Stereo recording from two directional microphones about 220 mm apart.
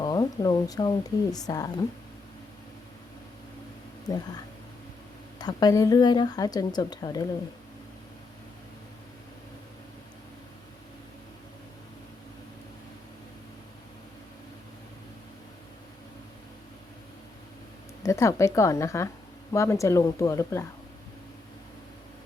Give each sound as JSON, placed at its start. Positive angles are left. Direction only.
{"t": 0.0, "sound": "speech", "side_deg": 20}
{"t": 5.4, "sound": "speech", "side_deg": 20}
{"t": 18.0, "sound": "speech", "side_deg": 15}